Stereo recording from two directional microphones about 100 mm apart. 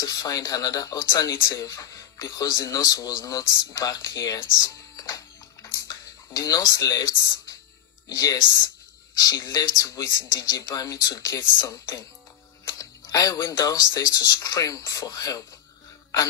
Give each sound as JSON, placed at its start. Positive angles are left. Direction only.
{"t": 0.0, "sound": "speech", "side_deg": 35}
{"t": 4.9, "sound": "a sound", "side_deg": 35}
{"t": 8.1, "sound": "speech", "side_deg": 35}